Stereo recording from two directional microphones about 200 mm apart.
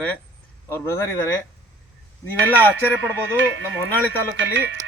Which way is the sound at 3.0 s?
65° right (ahead or behind).